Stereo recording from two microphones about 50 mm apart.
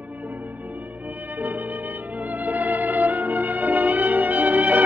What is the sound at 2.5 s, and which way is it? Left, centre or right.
Music, right.